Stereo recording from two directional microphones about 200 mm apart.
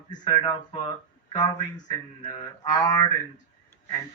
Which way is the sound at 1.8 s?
25° left (ahead or behind).